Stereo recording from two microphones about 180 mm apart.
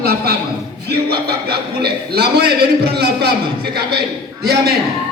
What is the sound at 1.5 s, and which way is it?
A man's voice, 60° right (ahead or behind).